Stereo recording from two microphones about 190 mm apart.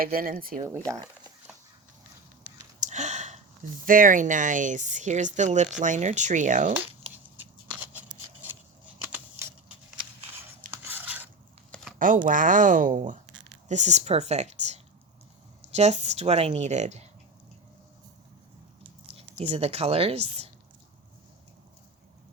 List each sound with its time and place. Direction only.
0.0 s speech: 50° right (ahead or behind)
0.7 s speech: 15° right (ahead or behind)
2.8 s a sound: 40° right (ahead or behind)
3.8 s speech: 45° right (ahead or behind)
7.8 s scissors: 10° right (ahead or behind)
9.0 s a sound: 10° right (ahead or behind)
10.7 s a sound: 10° right (ahead or behind)
11.9 s speech: 45° right (ahead or behind)
19.1 s speech: 35° right (ahead or behind)